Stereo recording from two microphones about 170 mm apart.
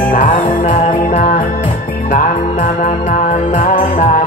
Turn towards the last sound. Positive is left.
turn(degrees=55)  # may be behind; listen again after turning